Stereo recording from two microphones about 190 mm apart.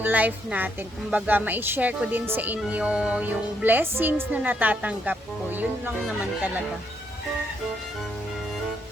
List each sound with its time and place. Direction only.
0.0 s speech: 10° right (ahead or behind)